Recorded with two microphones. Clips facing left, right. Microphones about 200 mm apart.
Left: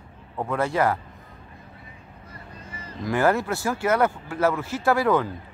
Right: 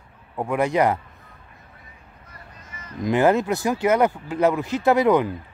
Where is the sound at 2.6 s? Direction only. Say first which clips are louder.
Left 4 dB; 30° left (ahead or behind).